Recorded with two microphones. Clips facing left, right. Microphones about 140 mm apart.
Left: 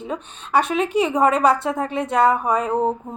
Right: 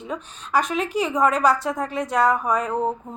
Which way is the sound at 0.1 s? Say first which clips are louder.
Left 2 dB; 25° left (ahead or behind).